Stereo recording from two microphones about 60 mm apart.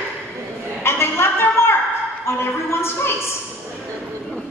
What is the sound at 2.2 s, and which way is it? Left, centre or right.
A woman's voice, left.